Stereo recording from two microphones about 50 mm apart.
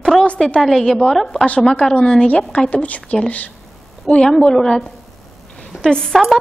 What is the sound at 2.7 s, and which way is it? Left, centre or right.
Speech, left.